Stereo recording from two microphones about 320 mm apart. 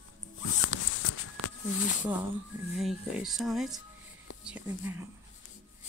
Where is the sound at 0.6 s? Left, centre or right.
Left.